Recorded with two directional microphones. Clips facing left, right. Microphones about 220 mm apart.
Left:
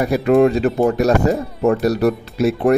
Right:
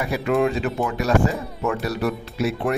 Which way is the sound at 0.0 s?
40° left (ahead or behind).